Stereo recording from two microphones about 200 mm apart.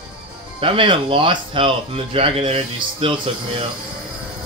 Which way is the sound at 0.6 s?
25° right (ahead or behind).